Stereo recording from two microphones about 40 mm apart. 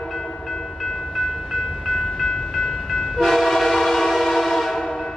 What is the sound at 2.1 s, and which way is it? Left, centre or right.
Train, centre.